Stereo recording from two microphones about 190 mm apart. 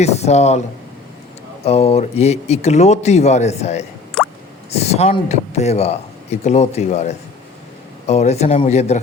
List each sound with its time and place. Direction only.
0.0 s speech: 35° left (ahead or behind)
1.6 s speech: 30° left (ahead or behind)
4.2 s drip: 5° left (ahead or behind)
4.7 s speech: 35° left (ahead or behind)